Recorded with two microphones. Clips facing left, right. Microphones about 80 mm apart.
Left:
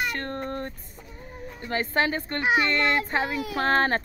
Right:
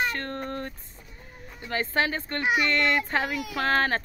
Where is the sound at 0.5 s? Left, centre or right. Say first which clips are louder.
Left 1 dB; left.